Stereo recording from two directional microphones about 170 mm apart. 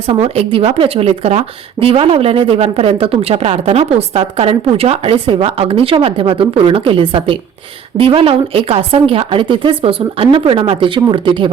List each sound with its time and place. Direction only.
0.1 s a woman's voice: 35° right (ahead or behind)